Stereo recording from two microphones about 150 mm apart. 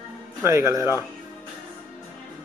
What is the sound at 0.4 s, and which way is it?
Speech, 20° right (ahead or behind).